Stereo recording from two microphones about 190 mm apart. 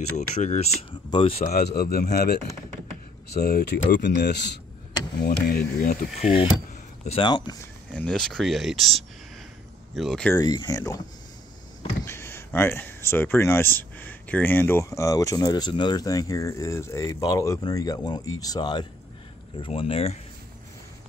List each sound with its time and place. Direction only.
0.7 s speech: 30° left (ahead or behind)
1.5 s speech: 55° left (ahead or behind)
7.1 s speech: 25° left (ahead or behind)
7.9 s speech: 5° left (ahead or behind)
10.3 s speech: 20° left (ahead or behind)
12.0 s speech: 15° left (ahead or behind); by 20.2 s 30° left (ahead or behind)